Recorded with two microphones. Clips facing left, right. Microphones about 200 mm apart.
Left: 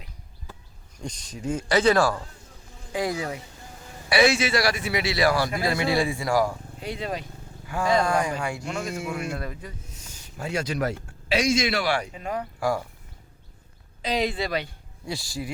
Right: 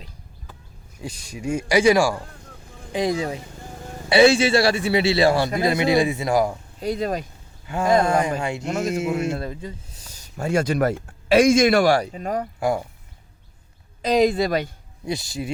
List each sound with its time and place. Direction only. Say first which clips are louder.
0.9 s speech: right 2 dB; 5° right (ahead or behind)
2.9 s speech: right 4 dB; 20° right (ahead or behind)
6.7 s speech: right 10 dB; 40° right (ahead or behind)
7.7 s speech: right 4 dB; 25° right (ahead or behind)
8.6 s speech: right 7 dB; 40° right (ahead or behind)
9.0 s a man's voice: right 7 dB; 25° right (ahead or behind); by 12.5 s 40° right (ahead or behind)
12.5 s speech: right 2 dB; 20° right (ahead or behind)
14.0 s speech: right 8 dB; 45° right (ahead or behind)
15.0 s speech: right 5 dB; 20° right (ahead or behind)